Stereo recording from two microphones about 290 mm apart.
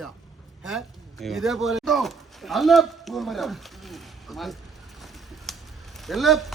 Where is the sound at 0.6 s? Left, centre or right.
Centre.